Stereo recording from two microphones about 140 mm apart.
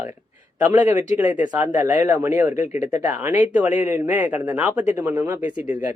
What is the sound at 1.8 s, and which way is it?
Speech, 15° right (ahead or behind).